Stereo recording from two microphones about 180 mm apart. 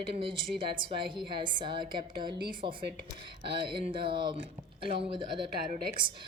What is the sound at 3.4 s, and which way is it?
Speech, 30° right (ahead or behind).